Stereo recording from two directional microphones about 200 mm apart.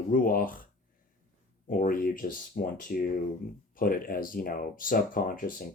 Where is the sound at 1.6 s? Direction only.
45° left (ahead or behind).